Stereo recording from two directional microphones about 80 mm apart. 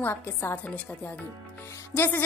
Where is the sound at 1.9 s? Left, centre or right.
Left.